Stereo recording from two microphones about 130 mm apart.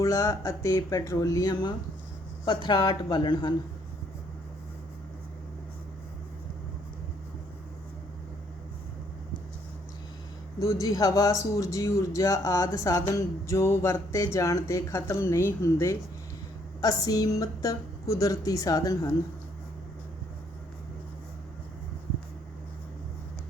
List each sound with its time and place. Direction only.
0.0 s speech: 25° left (ahead or behind)
10.6 s speech: 25° left (ahead or behind)